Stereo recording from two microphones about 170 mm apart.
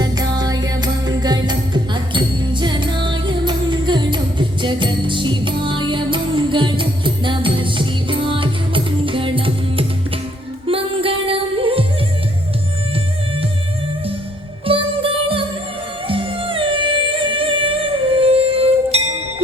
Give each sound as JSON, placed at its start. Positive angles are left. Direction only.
{"t": 0.0, "sound": "music", "side_deg": -25}
{"t": 14.7, "sound": "music", "side_deg": -30}